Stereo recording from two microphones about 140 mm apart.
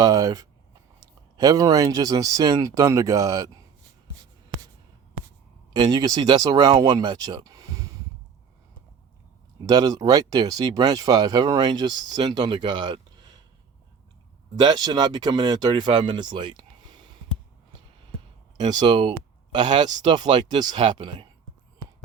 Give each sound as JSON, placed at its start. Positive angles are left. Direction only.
{"t": 0.0, "sound": "speech", "side_deg": -25}
{"t": 5.7, "sound": "speech", "side_deg": -30}
{"t": 9.6, "sound": "speech", "side_deg": -25}
{"t": 14.6, "sound": "speech", "side_deg": -30}
{"t": 18.5, "sound": "speech", "side_deg": -30}